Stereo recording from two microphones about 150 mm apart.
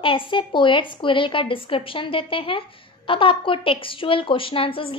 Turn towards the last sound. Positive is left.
turn(degrees=40)  # may be behind; listen again after turning